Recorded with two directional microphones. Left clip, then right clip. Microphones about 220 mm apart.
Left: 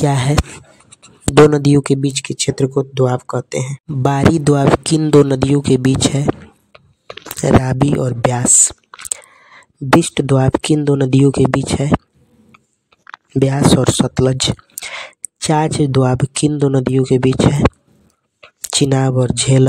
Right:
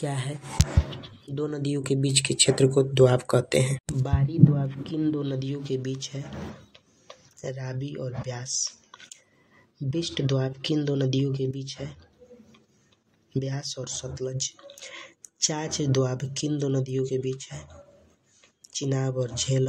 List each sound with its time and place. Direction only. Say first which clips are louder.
0.0 s speech: left 17 dB; 50° left (ahead or behind); by 3.8 s 30° left (ahead or behind)
4.0 s speech: left 14 dB; 55° left (ahead or behind)
6.7 s computer keyboard: left 15 dB; 50° left (ahead or behind)
10.1 s speech: left 14 dB; 50° left (ahead or behind)
13.3 s speech: left 19 dB; 55° left (ahead or behind)